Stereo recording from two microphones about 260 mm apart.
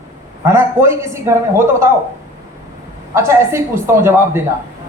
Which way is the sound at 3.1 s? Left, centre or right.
Centre.